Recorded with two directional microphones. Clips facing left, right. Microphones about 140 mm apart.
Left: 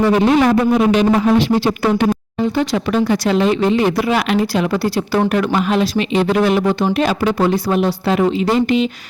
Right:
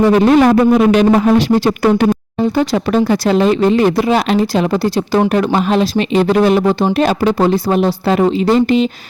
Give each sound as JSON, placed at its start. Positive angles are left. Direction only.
{"t": 0.1, "sound": "speech", "side_deg": -45}
{"t": 3.9, "sound": "speech", "side_deg": -30}